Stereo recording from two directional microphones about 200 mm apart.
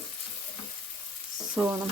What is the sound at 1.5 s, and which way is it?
Frying, 5° right (ahead or behind).